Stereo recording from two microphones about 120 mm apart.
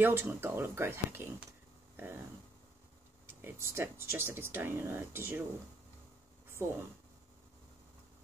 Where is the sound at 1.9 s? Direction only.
20° right (ahead or behind).